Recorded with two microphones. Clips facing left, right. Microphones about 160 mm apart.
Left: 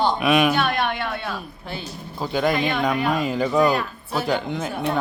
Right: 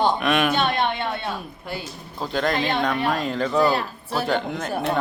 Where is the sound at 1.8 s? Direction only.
Centre (ahead or behind).